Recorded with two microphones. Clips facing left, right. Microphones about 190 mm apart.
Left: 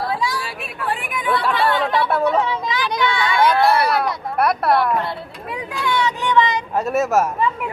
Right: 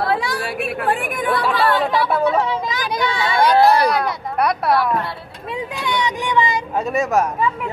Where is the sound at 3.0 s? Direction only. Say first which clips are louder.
Even; 35° right (ahead or behind).